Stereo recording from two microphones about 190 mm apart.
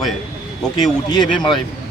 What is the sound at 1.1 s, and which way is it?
Speech, 20° left (ahead or behind).